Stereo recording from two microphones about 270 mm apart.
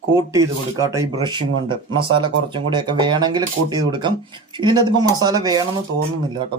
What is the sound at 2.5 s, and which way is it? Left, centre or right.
Speech, centre.